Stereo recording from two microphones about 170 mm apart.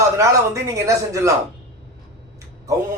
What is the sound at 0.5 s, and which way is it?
Speech, 15° right (ahead or behind).